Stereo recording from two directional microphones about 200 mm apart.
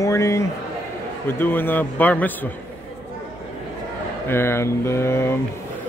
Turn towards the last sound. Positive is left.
turn(degrees=15)  # may be behind; listen again after turning